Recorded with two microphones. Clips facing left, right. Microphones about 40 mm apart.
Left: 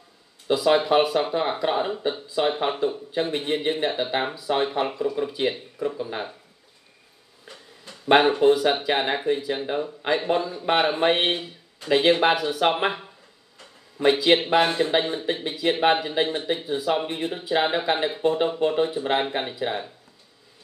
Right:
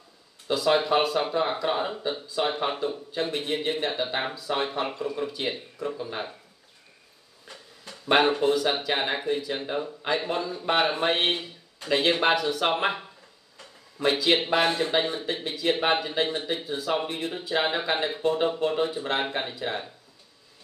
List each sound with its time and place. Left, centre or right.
0.5 s speech: centre
3.1 s speech: centre
3.5 s speech: centre
7.4 s a sound: centre
8.8 s speech: centre
9.5 s speech: centre
10.0 s speech: centre
11.2 s speech: centre
14.0 s speech: centre